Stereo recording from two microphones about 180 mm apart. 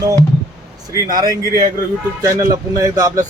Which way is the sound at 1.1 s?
20° right (ahead or behind).